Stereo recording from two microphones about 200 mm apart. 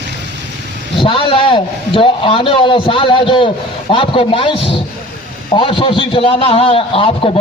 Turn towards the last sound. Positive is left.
turn(degrees=25)  # may be behind; listen again after turning